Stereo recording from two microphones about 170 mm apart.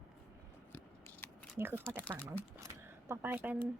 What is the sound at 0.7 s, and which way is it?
Scissors, 15° left (ahead or behind).